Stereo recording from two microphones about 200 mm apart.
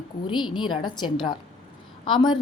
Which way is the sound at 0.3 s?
25° left (ahead or behind).